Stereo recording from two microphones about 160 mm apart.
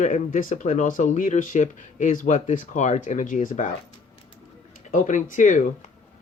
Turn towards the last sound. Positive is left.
turn(degrees=50)  # may be behind; listen again after turning